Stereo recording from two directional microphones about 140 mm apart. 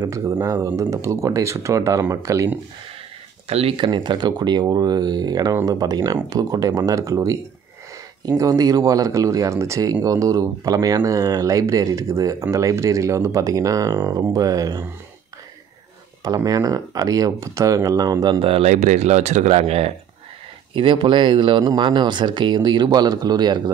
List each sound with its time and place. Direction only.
0.0 s speech: 25° right (ahead or behind)
3.4 s speech: 45° right (ahead or behind); by 14.9 s 25° right (ahead or behind)
16.3 s speech: 25° right (ahead or behind)
18.5 s speech: 50° right (ahead or behind)
20.7 s speech: 35° right (ahead or behind)